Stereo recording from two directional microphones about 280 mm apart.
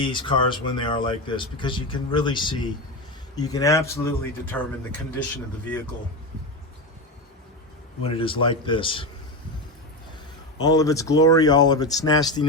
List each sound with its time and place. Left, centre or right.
0.0 s speech: centre
8.0 s speech: centre
10.6 s speech: centre